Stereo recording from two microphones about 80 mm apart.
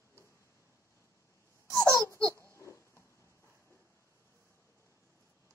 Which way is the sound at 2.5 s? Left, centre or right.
Left.